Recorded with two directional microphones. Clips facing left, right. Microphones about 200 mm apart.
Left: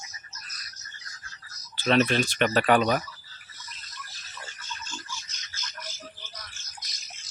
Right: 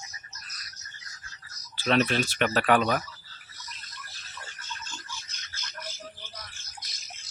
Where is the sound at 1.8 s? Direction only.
5° right (ahead or behind).